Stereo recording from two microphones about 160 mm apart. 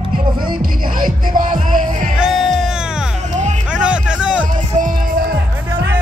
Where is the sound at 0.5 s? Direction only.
60° right (ahead or behind).